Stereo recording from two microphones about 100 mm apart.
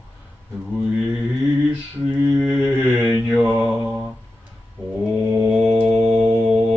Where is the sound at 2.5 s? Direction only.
15° right (ahead or behind).